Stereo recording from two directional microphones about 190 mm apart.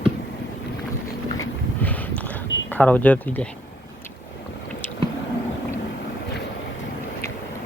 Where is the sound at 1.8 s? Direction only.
10° left (ahead or behind).